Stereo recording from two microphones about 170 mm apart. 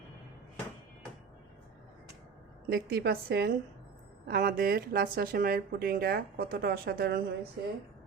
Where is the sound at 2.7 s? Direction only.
65° right (ahead or behind).